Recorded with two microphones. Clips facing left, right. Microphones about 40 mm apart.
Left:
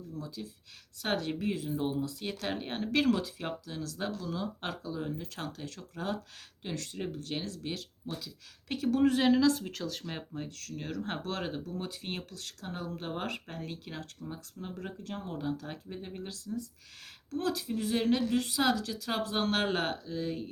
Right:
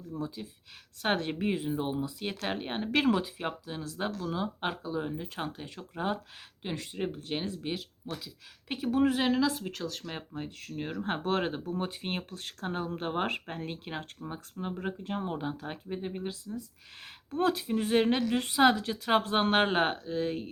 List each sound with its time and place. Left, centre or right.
0.1 s speech: right; by 10.2 s centre
10.3 s speech: centre
11.2 s speech: right
17.3 s speech: right